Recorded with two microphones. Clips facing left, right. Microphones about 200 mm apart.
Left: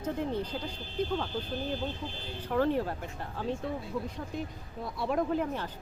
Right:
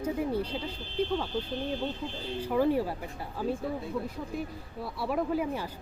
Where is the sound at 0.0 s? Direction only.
10° right (ahead or behind).